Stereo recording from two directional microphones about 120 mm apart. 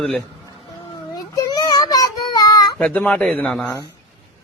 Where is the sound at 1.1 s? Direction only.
35° left (ahead or behind).